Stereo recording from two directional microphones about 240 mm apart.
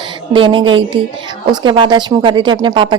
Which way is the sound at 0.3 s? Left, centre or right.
Right.